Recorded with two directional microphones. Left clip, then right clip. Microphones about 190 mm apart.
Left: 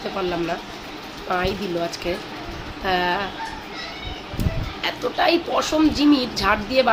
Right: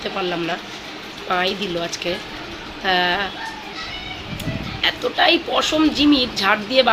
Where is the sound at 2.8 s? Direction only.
Centre (ahead or behind).